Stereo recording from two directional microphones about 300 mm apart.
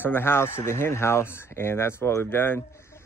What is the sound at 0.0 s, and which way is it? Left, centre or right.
Speech, centre.